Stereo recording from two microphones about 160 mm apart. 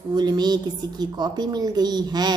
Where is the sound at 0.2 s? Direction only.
25° right (ahead or behind).